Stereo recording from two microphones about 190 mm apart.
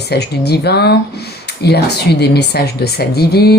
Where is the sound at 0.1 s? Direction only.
60° left (ahead or behind).